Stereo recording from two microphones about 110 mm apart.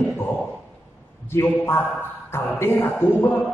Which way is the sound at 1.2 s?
25° left (ahead or behind).